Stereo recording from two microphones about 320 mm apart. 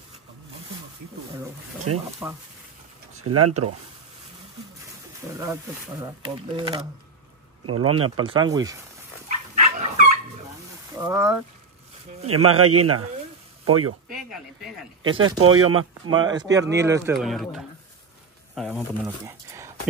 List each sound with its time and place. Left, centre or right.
1.9 s a man's voice: right
3.2 s a man's voice: right
5.4 s speech: centre
7.6 s a man's voice: right
8.2 s speech: centre
9.6 s dog: right
11.0 s speech: centre
12.3 s a man's voice: right
15.0 s speech: right
16.1 s speech: centre